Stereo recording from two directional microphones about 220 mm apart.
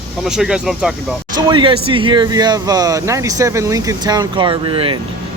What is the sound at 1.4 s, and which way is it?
Speech, 20° right (ahead or behind).